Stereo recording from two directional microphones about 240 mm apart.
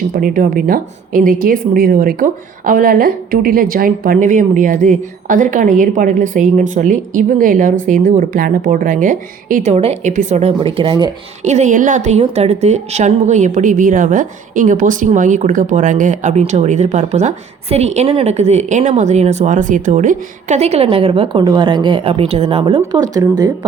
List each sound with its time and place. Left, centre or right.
0.1 s a woman's voice: right; by 11.1 s centre
11.4 s a woman's voice: right